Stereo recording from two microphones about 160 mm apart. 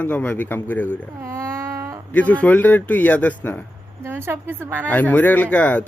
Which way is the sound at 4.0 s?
15° right (ahead or behind).